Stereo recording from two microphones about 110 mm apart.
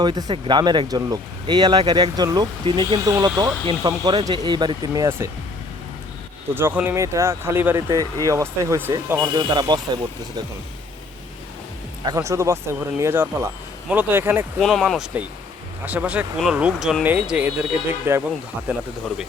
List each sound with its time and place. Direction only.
0.0 s speech: 40° right (ahead or behind)
3.0 s speech: 35° right (ahead or behind)
6.5 s speech: 20° right (ahead or behind)
7.8 s speech: 35° right (ahead or behind)
9.1 s speech: 40° right (ahead or behind)
12.0 s speech: 30° right (ahead or behind)
14.6 s speech: centre (ahead or behind)
15.8 s speech: 15° right (ahead or behind)